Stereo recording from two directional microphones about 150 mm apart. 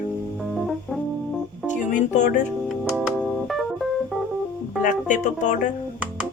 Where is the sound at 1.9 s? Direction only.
55° left (ahead or behind).